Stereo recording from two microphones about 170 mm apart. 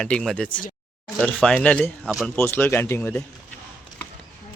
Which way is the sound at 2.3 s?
15° left (ahead or behind).